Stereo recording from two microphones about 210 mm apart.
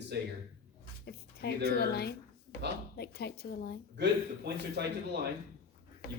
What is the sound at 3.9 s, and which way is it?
Speech, 55° right (ahead or behind).